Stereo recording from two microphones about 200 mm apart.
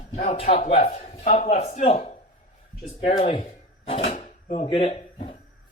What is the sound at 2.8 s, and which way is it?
Drawer open or close, 30° left (ahead or behind).